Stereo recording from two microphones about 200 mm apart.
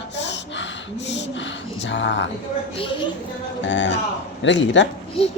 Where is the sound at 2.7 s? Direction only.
25° left (ahead or behind).